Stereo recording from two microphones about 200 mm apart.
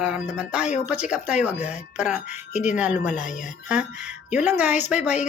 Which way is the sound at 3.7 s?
5° right (ahead or behind).